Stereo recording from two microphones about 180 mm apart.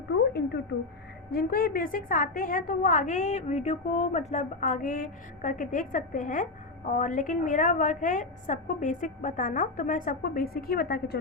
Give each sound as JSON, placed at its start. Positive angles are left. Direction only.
{"t": 0.1, "sound": "speech", "side_deg": 70}
{"t": 1.3, "sound": "a woman's voice", "side_deg": 55}